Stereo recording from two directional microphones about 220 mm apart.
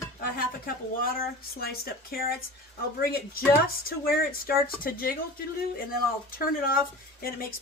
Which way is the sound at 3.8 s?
40° left (ahead or behind).